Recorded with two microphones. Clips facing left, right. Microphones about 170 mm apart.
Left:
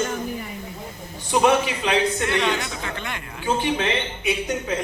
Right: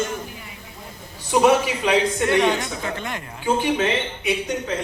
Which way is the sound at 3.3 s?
10° right (ahead or behind).